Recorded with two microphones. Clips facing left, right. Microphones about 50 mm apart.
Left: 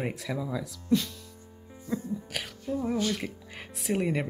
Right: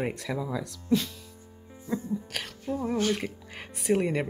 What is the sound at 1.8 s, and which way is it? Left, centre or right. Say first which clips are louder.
Music: right 2 dB; centre.